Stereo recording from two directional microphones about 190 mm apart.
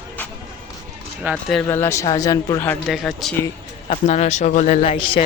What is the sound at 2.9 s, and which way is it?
Speech, centre (ahead or behind).